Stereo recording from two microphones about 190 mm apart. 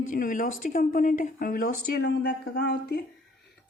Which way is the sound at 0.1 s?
45° left (ahead or behind).